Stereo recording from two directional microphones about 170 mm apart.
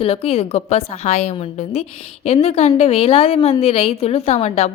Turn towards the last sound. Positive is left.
turn(degrees=40)  # may be behind; listen again after turning